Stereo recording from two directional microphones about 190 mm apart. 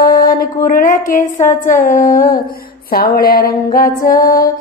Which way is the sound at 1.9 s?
15° left (ahead or behind).